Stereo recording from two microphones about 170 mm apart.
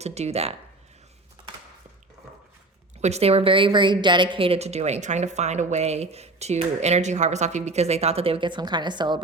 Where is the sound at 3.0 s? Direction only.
40° right (ahead or behind).